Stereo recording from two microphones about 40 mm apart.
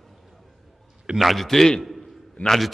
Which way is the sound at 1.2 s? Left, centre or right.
Centre.